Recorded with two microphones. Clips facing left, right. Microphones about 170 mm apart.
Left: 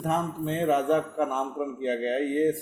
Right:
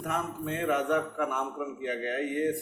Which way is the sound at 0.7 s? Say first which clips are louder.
Left 4 dB; 35° left (ahead or behind).